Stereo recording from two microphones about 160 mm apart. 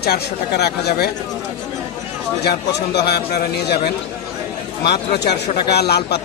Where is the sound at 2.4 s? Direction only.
90° left.